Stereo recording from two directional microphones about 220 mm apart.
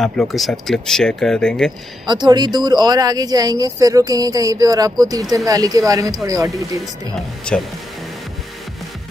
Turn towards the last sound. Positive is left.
turn(degrees=5)  # may be behind; listen again after turning